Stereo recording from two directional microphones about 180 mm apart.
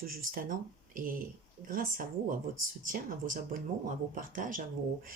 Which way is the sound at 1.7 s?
50° right (ahead or behind).